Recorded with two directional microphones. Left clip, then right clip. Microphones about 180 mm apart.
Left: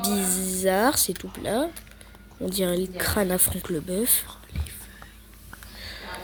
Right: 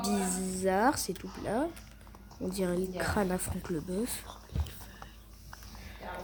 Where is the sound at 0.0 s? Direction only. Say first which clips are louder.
Left 6 dB; 30° left (ahead or behind).